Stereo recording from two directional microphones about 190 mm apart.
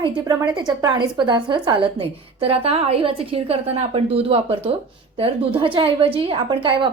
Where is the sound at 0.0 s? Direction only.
20° right (ahead or behind).